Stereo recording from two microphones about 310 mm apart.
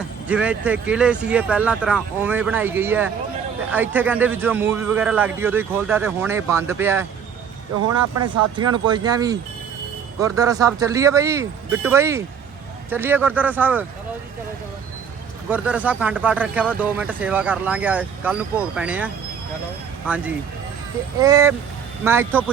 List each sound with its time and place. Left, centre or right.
0.3 s a man's voice: centre
8.1 s speech: right
8.5 s a man's voice: centre
15.4 s a man's voice: centre